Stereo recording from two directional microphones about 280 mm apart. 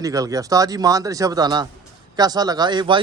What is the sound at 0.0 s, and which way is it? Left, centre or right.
Speech, centre.